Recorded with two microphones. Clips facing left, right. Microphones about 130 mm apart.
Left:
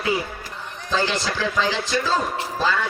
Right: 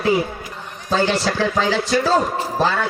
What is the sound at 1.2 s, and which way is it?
A man's voice, 50° right (ahead or behind).